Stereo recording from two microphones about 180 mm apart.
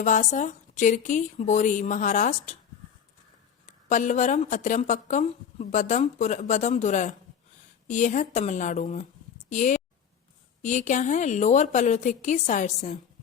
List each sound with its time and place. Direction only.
0.0 s speech: 45° left (ahead or behind)
3.7 s speech: 45° left (ahead or behind)